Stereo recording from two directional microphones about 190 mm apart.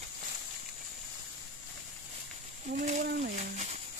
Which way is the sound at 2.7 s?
40° right (ahead or behind).